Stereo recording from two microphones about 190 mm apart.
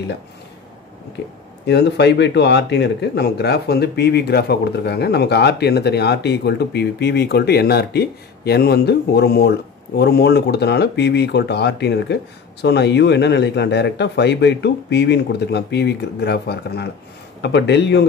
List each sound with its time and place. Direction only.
1.7 s speech: 60° left (ahead or behind)